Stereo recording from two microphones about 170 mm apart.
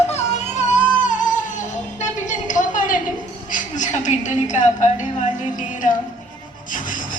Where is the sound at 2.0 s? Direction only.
45° left (ahead or behind).